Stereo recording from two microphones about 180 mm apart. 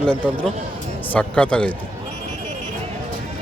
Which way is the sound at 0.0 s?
5° left (ahead or behind).